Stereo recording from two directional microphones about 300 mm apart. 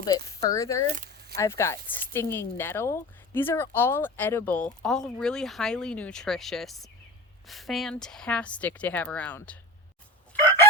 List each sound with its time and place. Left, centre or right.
0.4 s speech: centre
0.9 s a sound: right
1.4 s speech: centre
10.3 s chicken: centre